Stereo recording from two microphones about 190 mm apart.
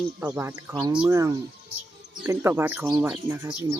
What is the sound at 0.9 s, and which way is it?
Speech, 5° right (ahead or behind).